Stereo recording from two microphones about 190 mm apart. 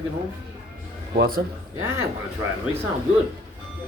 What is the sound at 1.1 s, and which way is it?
Speech, 50° right (ahead or behind).